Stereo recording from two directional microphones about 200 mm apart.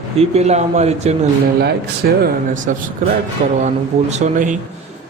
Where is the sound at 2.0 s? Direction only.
55° right (ahead or behind).